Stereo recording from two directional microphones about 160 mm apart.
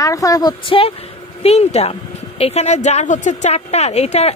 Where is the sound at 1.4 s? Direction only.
40° left (ahead or behind).